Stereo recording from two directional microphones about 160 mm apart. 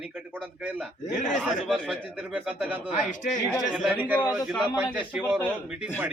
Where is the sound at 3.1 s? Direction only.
55° left (ahead or behind).